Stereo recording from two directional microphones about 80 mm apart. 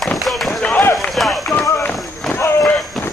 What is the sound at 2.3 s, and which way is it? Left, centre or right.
Run, left.